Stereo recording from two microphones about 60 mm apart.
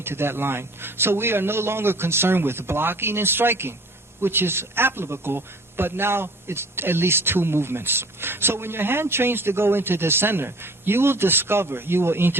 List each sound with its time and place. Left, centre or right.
0.0 s speech: right